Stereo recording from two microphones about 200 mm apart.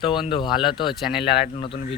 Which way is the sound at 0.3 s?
25° left (ahead or behind).